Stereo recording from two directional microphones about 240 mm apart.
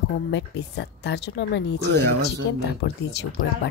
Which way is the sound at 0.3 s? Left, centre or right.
Left.